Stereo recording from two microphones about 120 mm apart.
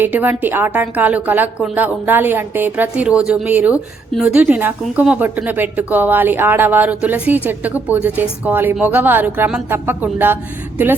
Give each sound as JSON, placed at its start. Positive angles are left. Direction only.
{"t": 0.0, "sound": "a woman's voice", "side_deg": -15}
{"t": 4.4, "sound": "speech", "side_deg": -15}